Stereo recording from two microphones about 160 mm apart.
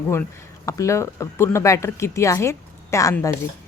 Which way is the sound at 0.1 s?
20° left (ahead or behind).